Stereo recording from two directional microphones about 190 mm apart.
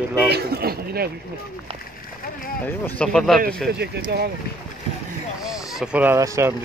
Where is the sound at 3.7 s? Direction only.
60° right (ahead or behind).